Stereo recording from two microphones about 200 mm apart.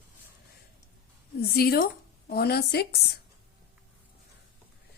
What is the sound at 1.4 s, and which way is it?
A woman's voice, 50° left (ahead or behind).